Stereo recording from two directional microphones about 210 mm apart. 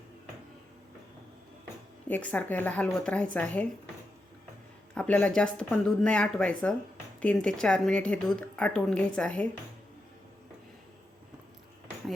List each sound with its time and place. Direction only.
2.0 s speech: 10° left (ahead or behind)
4.9 s a woman's voice: 5° left (ahead or behind)